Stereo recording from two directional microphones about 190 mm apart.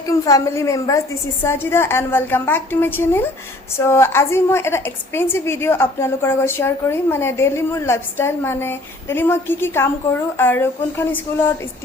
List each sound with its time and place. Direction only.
0.3 s a woman's voice: 15° left (ahead or behind)